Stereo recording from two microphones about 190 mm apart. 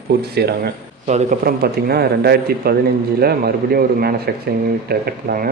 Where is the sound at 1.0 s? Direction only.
40° right (ahead or behind).